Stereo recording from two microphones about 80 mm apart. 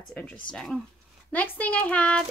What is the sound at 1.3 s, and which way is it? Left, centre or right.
Speech, centre.